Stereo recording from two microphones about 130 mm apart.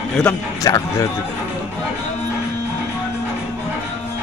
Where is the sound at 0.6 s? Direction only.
30° left (ahead or behind).